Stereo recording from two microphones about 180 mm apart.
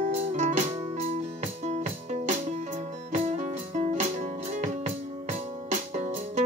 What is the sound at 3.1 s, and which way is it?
Music, 40° right (ahead or behind).